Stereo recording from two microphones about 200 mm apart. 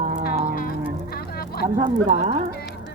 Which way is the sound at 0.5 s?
45° left (ahead or behind).